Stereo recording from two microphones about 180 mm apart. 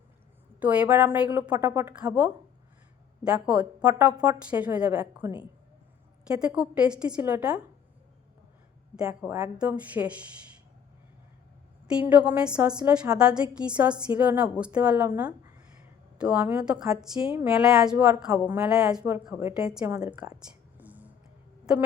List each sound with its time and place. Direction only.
0.6 s a woman's voice: 10° right (ahead or behind)
9.0 s a woman's voice: 15° right (ahead or behind)
11.9 s a woman's voice: 10° right (ahead or behind)
19.1 s a woman's voice: 15° right (ahead or behind)
20.7 s music: 10° right (ahead or behind)